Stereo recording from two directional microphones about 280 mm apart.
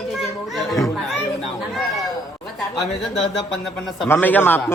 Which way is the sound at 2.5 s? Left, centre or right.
Centre.